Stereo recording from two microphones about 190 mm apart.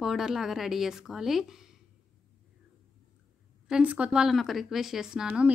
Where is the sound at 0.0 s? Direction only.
Centre (ahead or behind).